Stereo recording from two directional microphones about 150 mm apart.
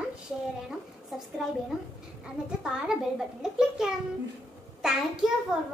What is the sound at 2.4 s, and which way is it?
A child's voice, 5° right (ahead or behind).